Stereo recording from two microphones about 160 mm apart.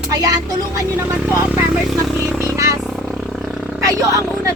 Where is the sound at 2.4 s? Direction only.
20° right (ahead or behind).